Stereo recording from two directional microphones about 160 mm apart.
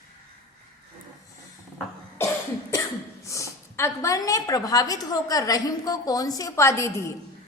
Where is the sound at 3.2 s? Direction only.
20° left (ahead or behind).